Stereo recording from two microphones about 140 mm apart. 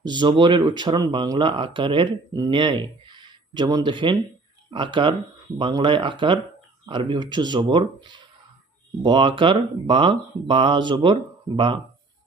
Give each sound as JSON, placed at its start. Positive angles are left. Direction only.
{"t": 0.0, "sound": "speech", "side_deg": -30}